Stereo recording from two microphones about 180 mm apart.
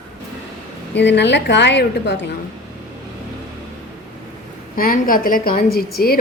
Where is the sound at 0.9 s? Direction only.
75° left (ahead or behind).